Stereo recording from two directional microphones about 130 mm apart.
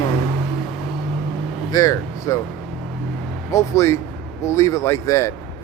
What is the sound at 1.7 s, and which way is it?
Speech, 25° left (ahead or behind).